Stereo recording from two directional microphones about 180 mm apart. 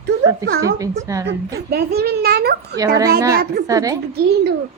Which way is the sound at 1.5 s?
60° right (ahead or behind).